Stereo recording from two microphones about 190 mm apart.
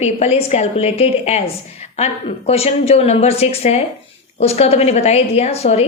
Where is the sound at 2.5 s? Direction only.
35° left (ahead or behind).